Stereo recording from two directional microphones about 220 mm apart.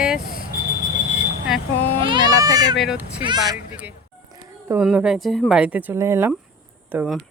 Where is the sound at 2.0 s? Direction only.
20° right (ahead or behind).